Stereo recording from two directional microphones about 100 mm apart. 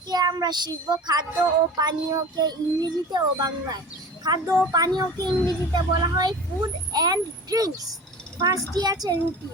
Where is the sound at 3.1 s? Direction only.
45° right (ahead or behind).